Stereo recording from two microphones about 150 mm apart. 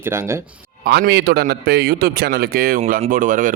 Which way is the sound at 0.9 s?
90° right.